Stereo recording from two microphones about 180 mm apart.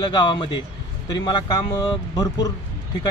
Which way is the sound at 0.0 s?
25° left (ahead or behind).